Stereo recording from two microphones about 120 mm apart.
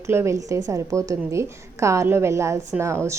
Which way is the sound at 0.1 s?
20° right (ahead or behind).